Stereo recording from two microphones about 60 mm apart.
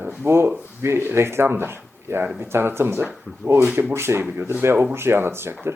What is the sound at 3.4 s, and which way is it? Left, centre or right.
Speech, left.